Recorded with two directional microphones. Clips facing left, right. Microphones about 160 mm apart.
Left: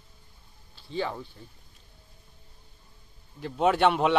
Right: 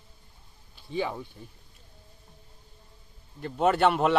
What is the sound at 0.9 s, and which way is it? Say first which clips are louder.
Speech: right 1 dB; 15° right (ahead or behind).